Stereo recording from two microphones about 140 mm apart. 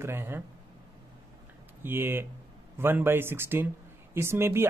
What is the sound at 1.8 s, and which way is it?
Speech, 15° right (ahead or behind).